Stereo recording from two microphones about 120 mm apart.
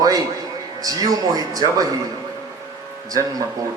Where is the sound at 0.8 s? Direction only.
30° right (ahead or behind).